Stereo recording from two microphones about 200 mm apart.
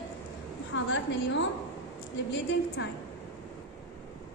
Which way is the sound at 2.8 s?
60° left (ahead or behind).